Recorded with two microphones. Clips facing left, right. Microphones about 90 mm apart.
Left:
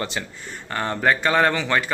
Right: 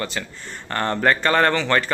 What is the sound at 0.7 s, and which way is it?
Speech, 5° left (ahead or behind).